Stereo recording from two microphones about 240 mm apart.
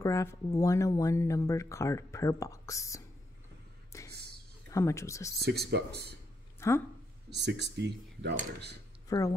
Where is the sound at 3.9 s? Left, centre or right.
Centre.